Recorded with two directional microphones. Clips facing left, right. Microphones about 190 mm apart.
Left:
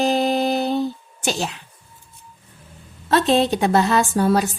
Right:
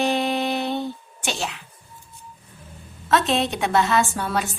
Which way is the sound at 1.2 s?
40° left (ahead or behind).